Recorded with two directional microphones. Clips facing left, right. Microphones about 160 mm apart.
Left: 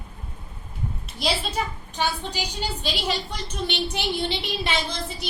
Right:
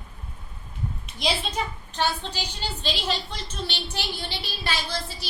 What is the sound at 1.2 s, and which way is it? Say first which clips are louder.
A woman's voice: left 1 dB; 10° left (ahead or behind).